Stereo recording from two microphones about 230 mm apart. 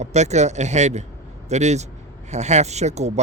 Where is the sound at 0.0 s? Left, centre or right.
Right.